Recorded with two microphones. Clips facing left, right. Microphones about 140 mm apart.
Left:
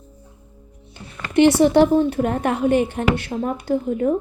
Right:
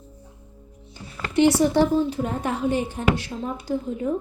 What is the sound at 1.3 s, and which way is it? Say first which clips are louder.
A woman's voice: left 4 dB; 65° left (ahead or behind).